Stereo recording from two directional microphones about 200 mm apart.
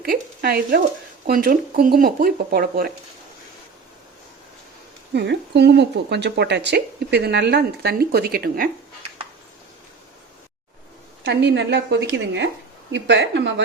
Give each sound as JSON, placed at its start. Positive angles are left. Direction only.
{"t": 0.0, "sound": "speech", "side_deg": -50}
{"t": 5.1, "sound": "speech", "side_deg": -55}
{"t": 11.3, "sound": "speech", "side_deg": -60}